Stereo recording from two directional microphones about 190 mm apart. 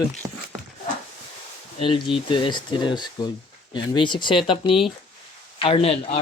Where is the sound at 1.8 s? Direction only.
25° left (ahead or behind).